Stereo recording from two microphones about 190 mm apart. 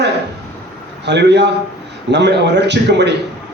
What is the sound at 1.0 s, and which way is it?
A man's voice, 65° right (ahead or behind).